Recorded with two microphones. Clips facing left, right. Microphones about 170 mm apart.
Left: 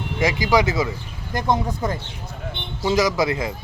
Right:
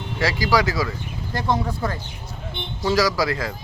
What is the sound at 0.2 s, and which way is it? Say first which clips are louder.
Speech: left 2 dB; 20° left (ahead or behind).